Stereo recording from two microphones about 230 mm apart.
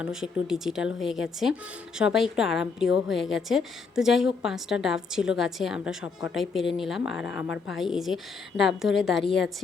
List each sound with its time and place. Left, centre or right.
0.0 s a woman's voice: centre
9.1 s a woman's voice: left